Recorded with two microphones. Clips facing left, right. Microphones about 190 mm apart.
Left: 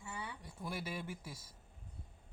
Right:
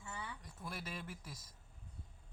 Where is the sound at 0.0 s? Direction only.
15° left (ahead or behind).